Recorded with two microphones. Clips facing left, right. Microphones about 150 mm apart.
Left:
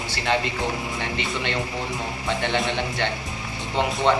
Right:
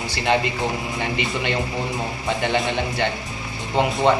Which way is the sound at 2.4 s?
10° right (ahead or behind).